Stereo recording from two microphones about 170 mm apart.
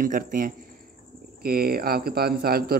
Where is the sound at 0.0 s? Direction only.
55° right (ahead or behind).